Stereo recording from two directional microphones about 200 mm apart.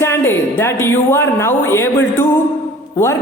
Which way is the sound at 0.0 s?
10° left (ahead or behind).